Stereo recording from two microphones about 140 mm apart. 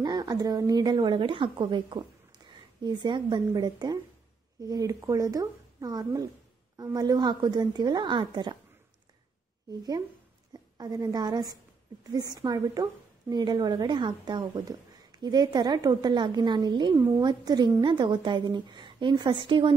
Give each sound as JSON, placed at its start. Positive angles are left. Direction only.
{"t": 0.0, "sound": "a woman's voice", "side_deg": -30}
{"t": 10.8, "sound": "speech", "side_deg": -30}